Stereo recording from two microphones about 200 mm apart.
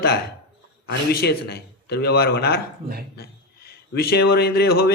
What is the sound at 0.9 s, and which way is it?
A man's voice, 55° left (ahead or behind).